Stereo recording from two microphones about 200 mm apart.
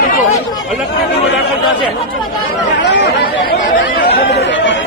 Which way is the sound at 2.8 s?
60° left (ahead or behind).